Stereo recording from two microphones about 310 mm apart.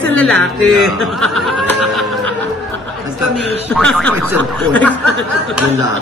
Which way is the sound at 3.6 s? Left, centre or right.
Centre.